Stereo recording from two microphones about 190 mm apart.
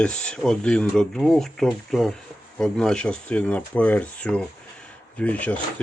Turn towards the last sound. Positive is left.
turn(degrees=5)  # may be behind; listen again after turning